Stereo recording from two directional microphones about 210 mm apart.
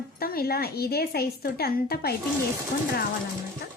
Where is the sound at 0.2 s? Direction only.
45° left (ahead or behind).